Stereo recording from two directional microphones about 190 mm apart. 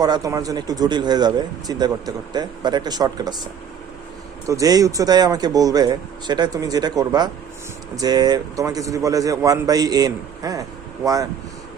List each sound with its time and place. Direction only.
0.0 s speech: 20° right (ahead or behind)
4.4 s speech: 20° right (ahead or behind)